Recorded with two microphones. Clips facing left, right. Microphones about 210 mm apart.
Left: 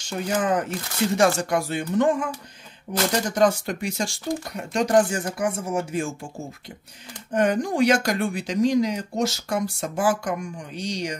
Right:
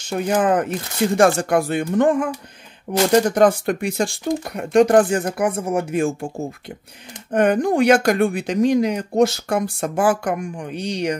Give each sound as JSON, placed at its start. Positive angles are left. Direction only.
{"t": 0.0, "sound": "speech", "side_deg": -55}